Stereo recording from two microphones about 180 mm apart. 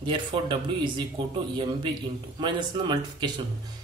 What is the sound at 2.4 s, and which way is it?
Speech, 25° right (ahead or behind).